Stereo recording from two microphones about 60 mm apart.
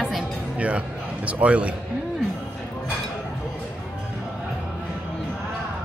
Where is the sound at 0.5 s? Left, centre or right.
Right.